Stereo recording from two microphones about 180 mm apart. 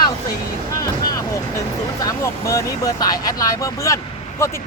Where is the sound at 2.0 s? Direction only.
15° left (ahead or behind).